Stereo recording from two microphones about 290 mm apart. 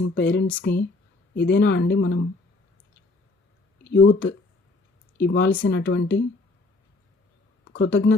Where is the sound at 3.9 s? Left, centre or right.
Left.